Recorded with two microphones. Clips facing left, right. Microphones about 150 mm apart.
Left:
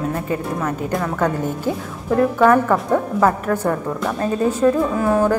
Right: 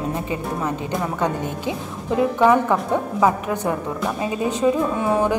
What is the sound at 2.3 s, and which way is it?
A woman's voice, 10° right (ahead or behind).